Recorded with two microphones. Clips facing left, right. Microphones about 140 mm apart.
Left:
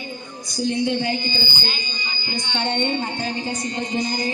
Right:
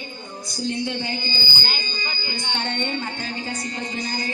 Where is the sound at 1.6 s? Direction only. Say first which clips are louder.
Left 1 dB; 50° right (ahead or behind).